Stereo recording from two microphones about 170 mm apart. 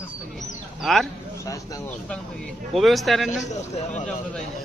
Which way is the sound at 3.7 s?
40° left (ahead or behind).